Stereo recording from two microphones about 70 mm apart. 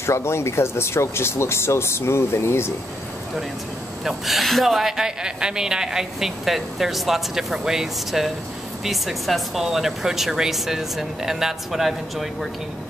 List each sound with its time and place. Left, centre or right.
0.0 s speech: left
4.0 s a woman's voice: centre